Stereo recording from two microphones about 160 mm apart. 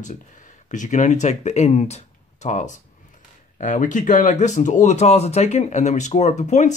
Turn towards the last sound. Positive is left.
turn(degrees=45)  # may be behind; listen again after turning